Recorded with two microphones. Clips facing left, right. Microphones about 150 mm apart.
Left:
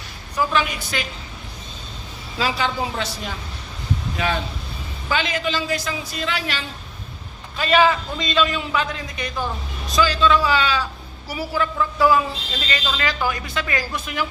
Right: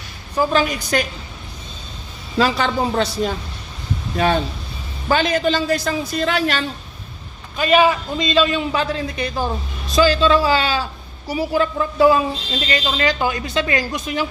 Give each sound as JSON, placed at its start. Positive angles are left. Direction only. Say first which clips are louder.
{"t": 0.3, "sound": "a man's voice", "louder": "right 4 dB", "side_deg": -40}
{"t": 2.4, "sound": "a woman's voice", "louder": "right 5 dB", "side_deg": -50}
{"t": 5.0, "sound": "a woman's voice", "louder": "right 6 dB", "side_deg": -45}
{"t": 7.5, "sound": "a man's voice", "louder": "right 2 dB", "side_deg": -15}